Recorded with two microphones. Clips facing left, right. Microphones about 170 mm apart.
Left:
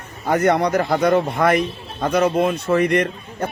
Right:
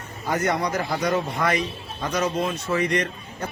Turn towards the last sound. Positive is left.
turn(degrees=55)  # may be behind; listen again after turning